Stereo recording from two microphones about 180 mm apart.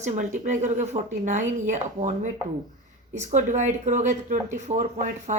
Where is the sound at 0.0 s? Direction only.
40° right (ahead or behind).